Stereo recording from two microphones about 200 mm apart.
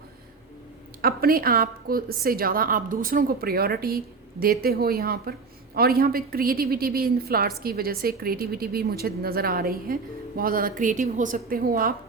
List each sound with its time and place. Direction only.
1.0 s a woman's voice: 50° right (ahead or behind)